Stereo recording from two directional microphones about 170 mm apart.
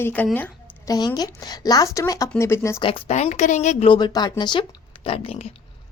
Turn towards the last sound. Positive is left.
turn(degrees=35)  # may be behind; listen again after turning